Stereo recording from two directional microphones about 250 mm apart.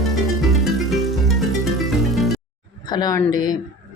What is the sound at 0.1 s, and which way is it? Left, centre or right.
Music, centre.